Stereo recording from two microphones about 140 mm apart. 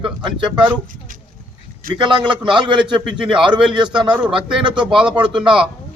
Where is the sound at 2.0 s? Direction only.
35° right (ahead or behind).